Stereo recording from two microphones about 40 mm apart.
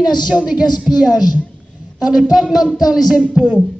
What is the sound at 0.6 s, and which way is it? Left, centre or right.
A woman's voice, right.